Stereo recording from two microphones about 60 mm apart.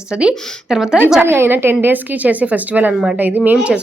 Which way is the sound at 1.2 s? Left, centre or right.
Right.